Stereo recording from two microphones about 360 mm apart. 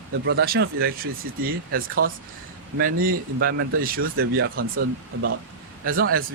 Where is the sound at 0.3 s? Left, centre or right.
Right.